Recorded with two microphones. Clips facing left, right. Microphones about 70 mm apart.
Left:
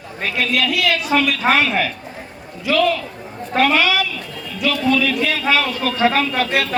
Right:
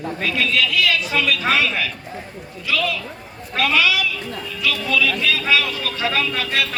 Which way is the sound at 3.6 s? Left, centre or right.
Left.